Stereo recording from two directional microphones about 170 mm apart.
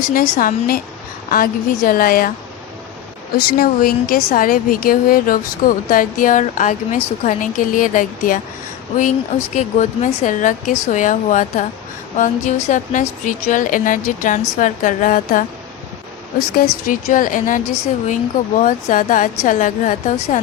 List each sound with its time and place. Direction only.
0.0 s a woman's voice: 50° left (ahead or behind)
3.3 s a woman's voice: 60° left (ahead or behind)
9.6 s a woman's voice: 45° left (ahead or behind)
16.6 s a woman's voice: 55° left (ahead or behind)